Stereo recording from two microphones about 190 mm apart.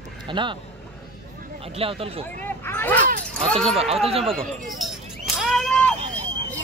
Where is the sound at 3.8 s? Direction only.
30° right (ahead or behind).